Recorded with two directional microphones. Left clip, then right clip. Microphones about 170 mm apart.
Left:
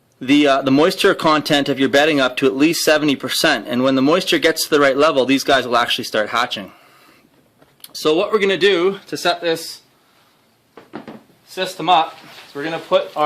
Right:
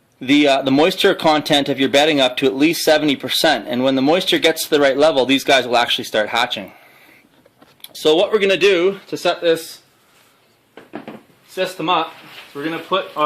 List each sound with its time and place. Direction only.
0.2 s speech: 30° left (ahead or behind)
8.0 s speech: 30° left (ahead or behind)
11.5 s speech: 25° left (ahead or behind)